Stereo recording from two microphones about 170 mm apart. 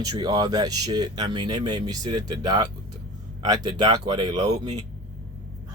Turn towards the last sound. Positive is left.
turn(degrees=-25)  # may be behind; listen again after turning